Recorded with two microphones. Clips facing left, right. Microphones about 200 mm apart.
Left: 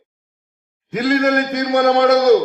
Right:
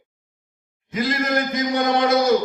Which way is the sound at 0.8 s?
65° left (ahead or behind).